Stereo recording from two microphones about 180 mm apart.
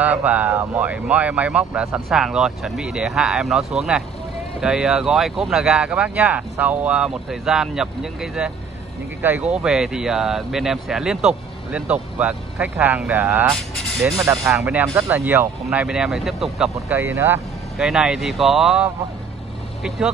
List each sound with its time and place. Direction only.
0.0 s speech: 10° right (ahead or behind)